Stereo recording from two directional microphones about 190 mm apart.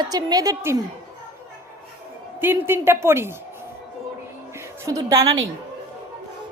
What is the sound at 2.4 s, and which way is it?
Speech, 10° right (ahead or behind).